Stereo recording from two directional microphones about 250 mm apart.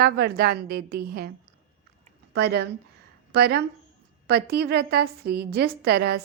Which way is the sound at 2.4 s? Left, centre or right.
Right.